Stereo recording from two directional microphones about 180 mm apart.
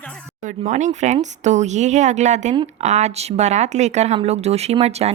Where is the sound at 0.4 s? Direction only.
40° right (ahead or behind).